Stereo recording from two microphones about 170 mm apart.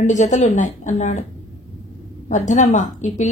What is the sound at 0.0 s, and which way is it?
A woman's voice, 45° left (ahead or behind).